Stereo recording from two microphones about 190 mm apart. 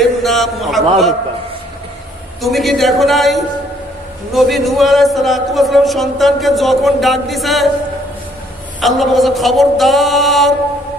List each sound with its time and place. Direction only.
0.0 s a man's voice: centre (ahead or behind)
2.4 s a man's voice: centre (ahead or behind)
8.8 s a man's voice: centre (ahead or behind)